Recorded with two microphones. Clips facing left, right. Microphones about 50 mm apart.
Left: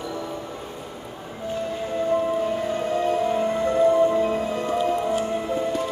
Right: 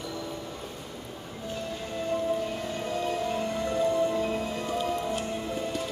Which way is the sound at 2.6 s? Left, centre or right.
Left.